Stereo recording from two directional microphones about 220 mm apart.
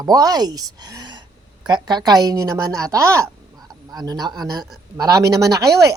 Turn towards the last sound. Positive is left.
turn(degrees=-50)  # may be behind; listen again after turning